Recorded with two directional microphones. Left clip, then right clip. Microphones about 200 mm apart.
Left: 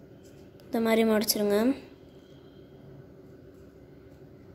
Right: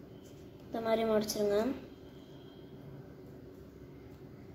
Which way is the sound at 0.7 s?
40° left (ahead or behind).